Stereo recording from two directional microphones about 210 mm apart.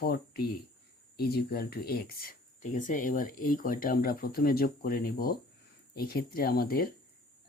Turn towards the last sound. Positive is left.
turn(degrees=45)  # may be behind; listen again after turning